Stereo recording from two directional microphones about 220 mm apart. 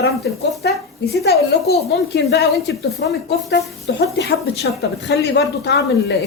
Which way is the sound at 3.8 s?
45° left (ahead or behind).